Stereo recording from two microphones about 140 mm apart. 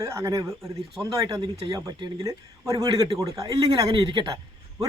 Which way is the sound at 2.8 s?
35° right (ahead or behind).